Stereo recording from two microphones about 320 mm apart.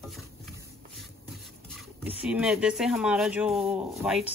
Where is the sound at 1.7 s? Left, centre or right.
Centre.